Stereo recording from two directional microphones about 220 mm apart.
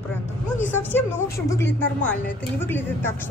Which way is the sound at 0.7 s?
10° left (ahead or behind).